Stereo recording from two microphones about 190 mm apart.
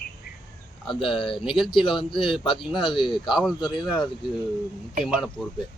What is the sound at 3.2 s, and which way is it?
Speech, centre (ahead or behind).